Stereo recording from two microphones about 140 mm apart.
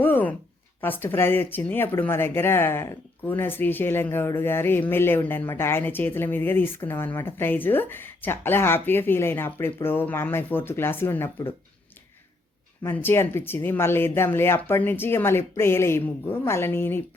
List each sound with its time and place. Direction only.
0.0 s a sound: 15° left (ahead or behind)
0.8 s speech: 15° left (ahead or behind)
12.8 s speech: 15° left (ahead or behind)